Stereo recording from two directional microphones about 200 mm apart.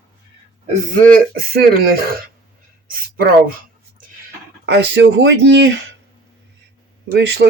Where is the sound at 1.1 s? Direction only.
45° right (ahead or behind).